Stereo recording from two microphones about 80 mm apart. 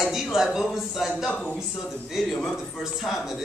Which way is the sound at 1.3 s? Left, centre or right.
Centre.